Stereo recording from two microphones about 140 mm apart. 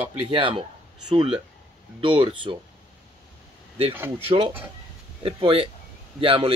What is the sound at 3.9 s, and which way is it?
Speech, 15° right (ahead or behind).